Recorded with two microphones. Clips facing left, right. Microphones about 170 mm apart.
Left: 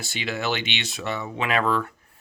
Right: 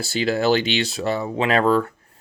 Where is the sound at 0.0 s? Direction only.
40° right (ahead or behind).